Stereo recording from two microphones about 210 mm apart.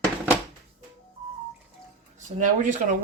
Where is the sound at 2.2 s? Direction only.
35° right (ahead or behind).